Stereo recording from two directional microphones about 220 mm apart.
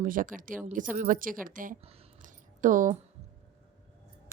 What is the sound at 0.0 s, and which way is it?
A woman's voice, 40° right (ahead or behind).